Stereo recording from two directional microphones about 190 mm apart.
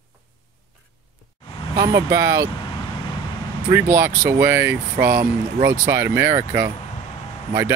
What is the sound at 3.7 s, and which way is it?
Speech, 10° right (ahead or behind).